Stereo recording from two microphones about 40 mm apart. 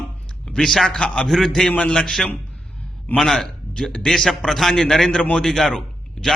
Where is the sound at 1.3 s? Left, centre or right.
Centre.